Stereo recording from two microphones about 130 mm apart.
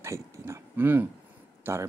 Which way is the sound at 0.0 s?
20° right (ahead or behind).